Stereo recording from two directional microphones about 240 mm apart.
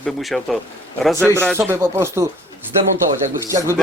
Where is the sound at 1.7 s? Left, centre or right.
Centre.